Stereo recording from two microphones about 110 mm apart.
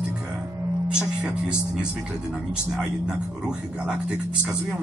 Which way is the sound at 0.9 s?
10° right (ahead or behind).